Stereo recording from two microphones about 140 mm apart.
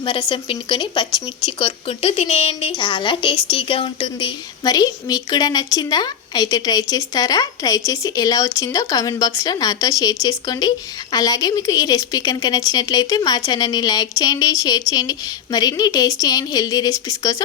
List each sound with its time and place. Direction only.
0.0 s speech: 35° left (ahead or behind)
2.7 s a woman's voice: 35° left (ahead or behind)